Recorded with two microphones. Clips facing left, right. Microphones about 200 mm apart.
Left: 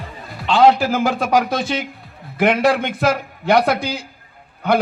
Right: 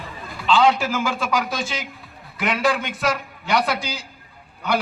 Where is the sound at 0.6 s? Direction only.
60° left (ahead or behind).